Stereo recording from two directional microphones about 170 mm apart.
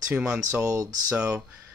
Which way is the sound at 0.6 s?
20° right (ahead or behind).